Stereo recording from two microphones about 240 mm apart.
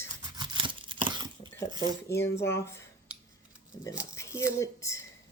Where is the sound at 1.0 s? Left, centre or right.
Centre.